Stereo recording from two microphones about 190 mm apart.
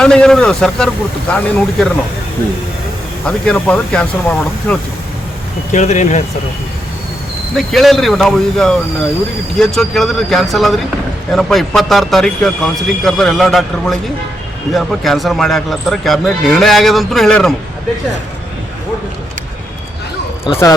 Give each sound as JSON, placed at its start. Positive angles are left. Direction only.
{"t": 0.0, "sound": "speech", "side_deg": 5}
{"t": 3.2, "sound": "speech", "side_deg": 5}
{"t": 5.7, "sound": "speech", "side_deg": 40}
{"t": 7.5, "sound": "speech", "side_deg": 0}